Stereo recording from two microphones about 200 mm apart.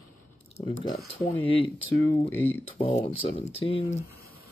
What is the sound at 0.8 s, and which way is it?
Speech, 25° left (ahead or behind).